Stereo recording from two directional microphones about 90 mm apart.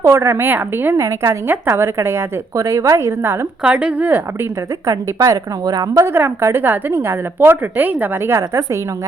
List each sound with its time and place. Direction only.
0.0 s a woman's voice: 30° right (ahead or behind)
3.6 s speech: 15° right (ahead or behind)
4.9 s a woman's voice: 40° right (ahead or behind)